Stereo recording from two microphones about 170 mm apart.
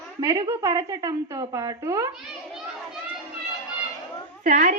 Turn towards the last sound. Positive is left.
turn(degrees=-45)  # may be behind; listen again after turning